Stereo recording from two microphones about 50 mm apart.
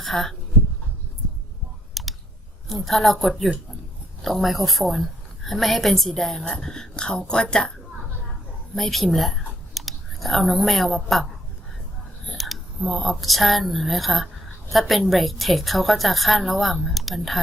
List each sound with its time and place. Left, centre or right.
0.0 s speech: centre
1.9 s clicking: centre
2.6 s a woman's voice: centre
8.7 s a woman's voice: centre
12.4 s a woman's voice: centre